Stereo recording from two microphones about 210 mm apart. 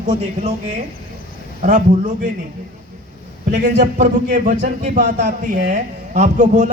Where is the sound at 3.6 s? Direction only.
40° right (ahead or behind).